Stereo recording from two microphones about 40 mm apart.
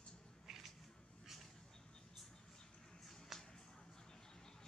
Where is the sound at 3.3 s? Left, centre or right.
Centre.